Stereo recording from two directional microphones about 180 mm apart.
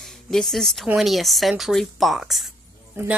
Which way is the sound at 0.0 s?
Centre (ahead or behind).